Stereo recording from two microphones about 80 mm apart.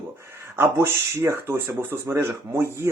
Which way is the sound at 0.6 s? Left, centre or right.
Right.